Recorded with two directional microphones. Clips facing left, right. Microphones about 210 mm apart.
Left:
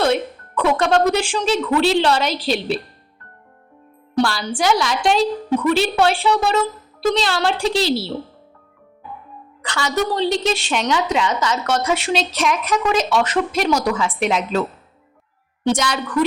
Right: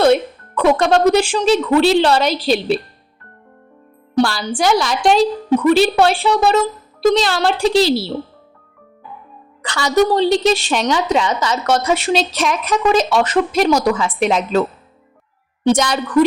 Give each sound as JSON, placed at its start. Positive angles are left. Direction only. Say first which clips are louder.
{"t": 0.0, "sound": "a woman's voice", "louder": "right 5 dB", "side_deg": -40}
{"t": 4.2, "sound": "a woman's voice", "louder": "right 3 dB", "side_deg": -40}
{"t": 9.7, "sound": "a woman's voice", "louder": "right 6 dB", "side_deg": -35}
{"t": 15.6, "sound": "a woman's voice", "louder": "right 4 dB", "side_deg": -40}